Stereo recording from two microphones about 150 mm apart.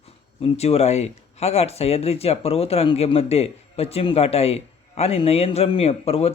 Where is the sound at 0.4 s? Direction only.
45° left (ahead or behind).